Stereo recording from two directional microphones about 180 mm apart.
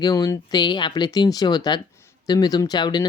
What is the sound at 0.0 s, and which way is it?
Speech, 20° left (ahead or behind).